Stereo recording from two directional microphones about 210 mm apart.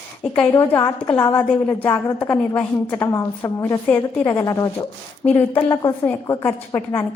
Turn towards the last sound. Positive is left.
turn(degrees=15)  # may be behind; listen again after turning